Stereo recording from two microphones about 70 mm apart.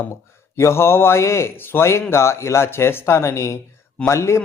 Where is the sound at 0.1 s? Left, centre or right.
Left.